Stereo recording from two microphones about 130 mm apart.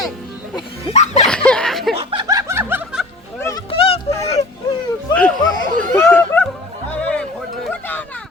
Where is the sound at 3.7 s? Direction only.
45° left (ahead or behind).